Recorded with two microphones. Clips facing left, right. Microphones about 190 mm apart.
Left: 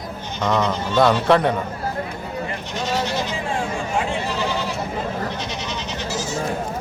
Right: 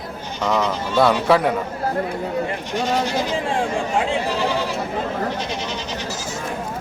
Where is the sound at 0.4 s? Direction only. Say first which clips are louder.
Even; 5° right (ahead or behind).